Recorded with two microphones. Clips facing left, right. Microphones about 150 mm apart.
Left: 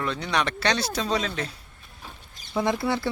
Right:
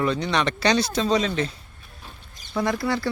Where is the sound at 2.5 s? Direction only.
20° left (ahead or behind).